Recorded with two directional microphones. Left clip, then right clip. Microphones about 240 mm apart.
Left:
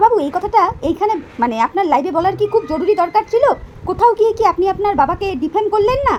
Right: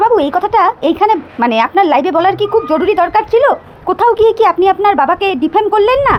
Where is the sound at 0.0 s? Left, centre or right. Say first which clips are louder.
Right 3 dB; centre.